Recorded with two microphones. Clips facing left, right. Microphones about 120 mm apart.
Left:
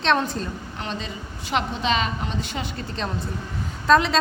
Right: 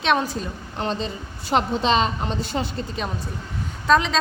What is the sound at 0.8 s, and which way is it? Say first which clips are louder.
A woman's voice: right 7 dB; 35° right (ahead or behind).